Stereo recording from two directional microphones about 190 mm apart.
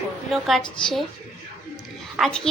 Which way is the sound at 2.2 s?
5° left (ahead or behind).